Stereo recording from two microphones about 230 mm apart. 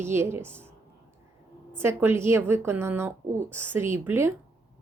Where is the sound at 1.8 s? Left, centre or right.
Centre.